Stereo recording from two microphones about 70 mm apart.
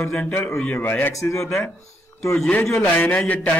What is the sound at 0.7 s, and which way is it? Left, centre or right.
Speech, left.